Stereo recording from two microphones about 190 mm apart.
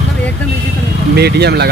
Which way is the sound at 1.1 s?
60° right (ahead or behind).